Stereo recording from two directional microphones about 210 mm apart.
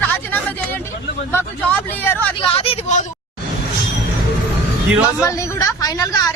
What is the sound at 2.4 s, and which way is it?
Vehicle, 25° left (ahead or behind).